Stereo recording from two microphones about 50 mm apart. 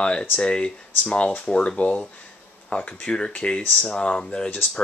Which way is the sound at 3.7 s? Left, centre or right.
Centre.